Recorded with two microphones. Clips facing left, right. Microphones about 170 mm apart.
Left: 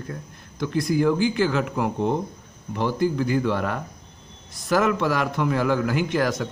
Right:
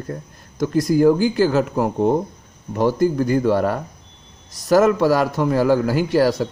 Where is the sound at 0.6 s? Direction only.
40° right (ahead or behind).